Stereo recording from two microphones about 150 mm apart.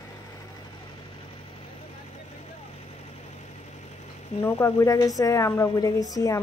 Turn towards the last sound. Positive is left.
turn(degrees=25)  # may be behind; listen again after turning